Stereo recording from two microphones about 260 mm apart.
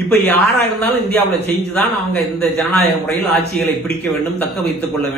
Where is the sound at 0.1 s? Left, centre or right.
Centre.